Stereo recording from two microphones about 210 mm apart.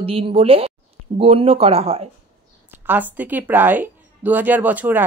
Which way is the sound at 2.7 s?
10° right (ahead or behind).